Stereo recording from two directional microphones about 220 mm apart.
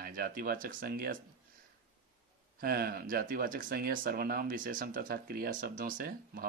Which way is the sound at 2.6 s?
45° right (ahead or behind).